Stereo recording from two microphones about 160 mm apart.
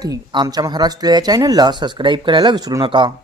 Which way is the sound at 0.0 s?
25° right (ahead or behind).